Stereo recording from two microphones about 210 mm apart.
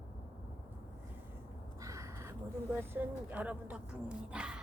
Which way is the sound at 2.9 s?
10° right (ahead or behind).